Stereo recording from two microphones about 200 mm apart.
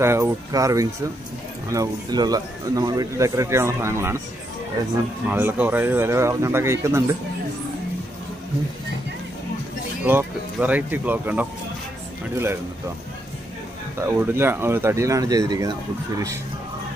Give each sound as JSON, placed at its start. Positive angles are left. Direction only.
{"t": 0.0, "sound": "speech", "side_deg": -15}
{"t": 5.3, "sound": "speech", "side_deg": -10}
{"t": 10.0, "sound": "speech", "side_deg": -10}
{"t": 13.9, "sound": "speech", "side_deg": -10}